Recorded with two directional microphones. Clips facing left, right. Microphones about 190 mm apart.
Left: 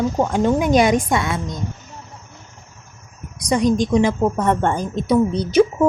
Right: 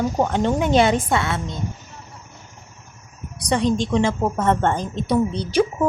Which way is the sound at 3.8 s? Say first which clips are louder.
Left 3 dB; 15° left (ahead or behind).